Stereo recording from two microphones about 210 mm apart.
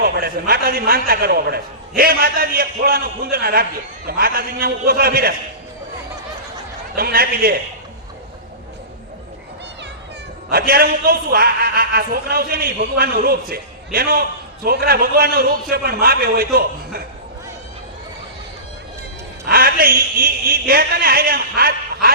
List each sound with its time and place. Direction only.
0.0 s a man's voice: 45° right (ahead or behind)
6.9 s a man's voice: 45° right (ahead or behind)
10.5 s a man's voice: 45° right (ahead or behind)
19.5 s a man's voice: 45° right (ahead or behind)